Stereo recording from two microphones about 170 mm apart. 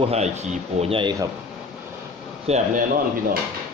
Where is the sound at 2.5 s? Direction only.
35° right (ahead or behind).